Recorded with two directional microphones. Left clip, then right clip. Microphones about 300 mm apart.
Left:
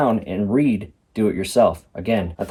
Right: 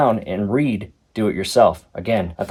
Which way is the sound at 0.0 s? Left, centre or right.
Right.